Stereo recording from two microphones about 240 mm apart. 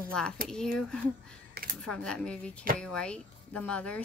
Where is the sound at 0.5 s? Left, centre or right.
Centre.